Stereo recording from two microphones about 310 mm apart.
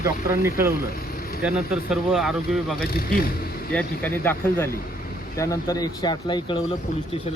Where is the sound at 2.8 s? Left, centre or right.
Left.